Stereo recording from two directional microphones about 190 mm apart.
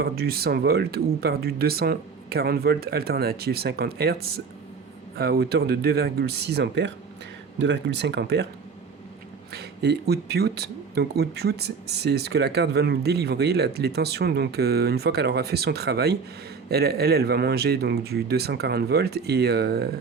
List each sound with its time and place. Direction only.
0.0 s speech: 55° right (ahead or behind)
9.5 s speech: 60° right (ahead or behind)